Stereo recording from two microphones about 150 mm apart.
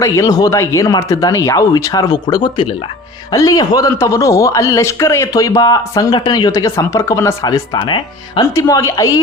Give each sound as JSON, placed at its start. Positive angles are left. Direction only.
{"t": 0.0, "sound": "a man's voice", "side_deg": 25}
{"t": 8.5, "sound": "a man's voice", "side_deg": 20}